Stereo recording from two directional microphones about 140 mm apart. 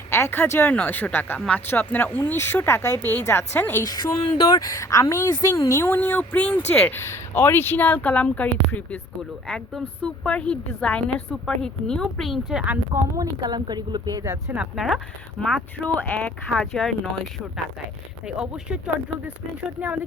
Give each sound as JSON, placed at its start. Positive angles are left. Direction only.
{"t": 0.1, "sound": "speech", "side_deg": 15}
{"t": 3.8, "sound": "a woman's voice", "side_deg": 30}
{"t": 13.1, "sound": "speech", "side_deg": -30}
{"t": 14.5, "sound": "a woman's voice", "side_deg": -5}
{"t": 18.3, "sound": "a woman's voice", "side_deg": -5}